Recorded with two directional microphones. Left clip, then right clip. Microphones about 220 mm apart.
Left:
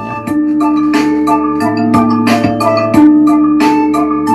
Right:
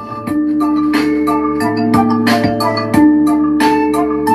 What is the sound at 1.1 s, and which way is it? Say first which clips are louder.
Marimba: left 3 dB; 10° left (ahead or behind).